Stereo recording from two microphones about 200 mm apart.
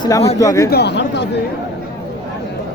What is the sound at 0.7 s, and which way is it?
Speech, 55° left (ahead or behind).